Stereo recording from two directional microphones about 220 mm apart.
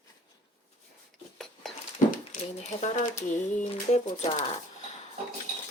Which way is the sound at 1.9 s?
35° left (ahead or behind).